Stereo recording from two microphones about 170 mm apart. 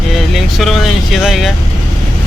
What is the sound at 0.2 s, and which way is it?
Speech, centre (ahead or behind).